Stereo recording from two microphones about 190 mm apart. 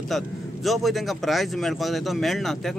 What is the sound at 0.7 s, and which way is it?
Speech, centre (ahead or behind).